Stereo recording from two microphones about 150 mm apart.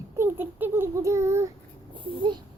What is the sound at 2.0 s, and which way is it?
Speech, 30° right (ahead or behind).